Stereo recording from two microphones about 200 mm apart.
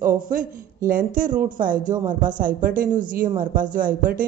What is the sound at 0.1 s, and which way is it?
Speech, 45° right (ahead or behind).